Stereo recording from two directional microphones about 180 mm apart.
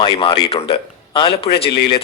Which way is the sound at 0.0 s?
25° left (ahead or behind).